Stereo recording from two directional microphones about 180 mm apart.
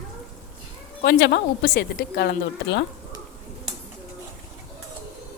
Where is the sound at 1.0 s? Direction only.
70° left (ahead or behind).